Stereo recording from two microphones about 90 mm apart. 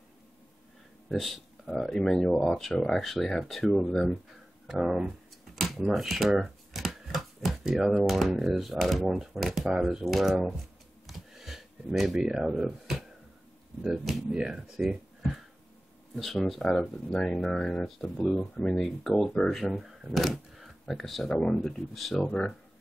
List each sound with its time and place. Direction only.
1.0 s speech: centre (ahead or behind)
4.6 s speech: 5° right (ahead or behind)
11.1 s a sound: centre (ahead or behind)
13.8 s speech: centre (ahead or behind)
22.2 s speech: 15° left (ahead or behind)